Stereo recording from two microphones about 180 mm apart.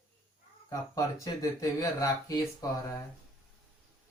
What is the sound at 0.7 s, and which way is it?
Speech, 20° left (ahead or behind).